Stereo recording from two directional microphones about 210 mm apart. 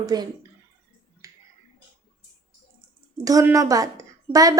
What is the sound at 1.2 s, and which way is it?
Finger snapping, 15° right (ahead or behind).